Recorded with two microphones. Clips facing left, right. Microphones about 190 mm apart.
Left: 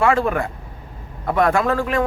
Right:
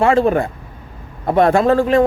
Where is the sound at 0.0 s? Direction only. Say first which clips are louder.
Right 4 dB; 30° right (ahead or behind).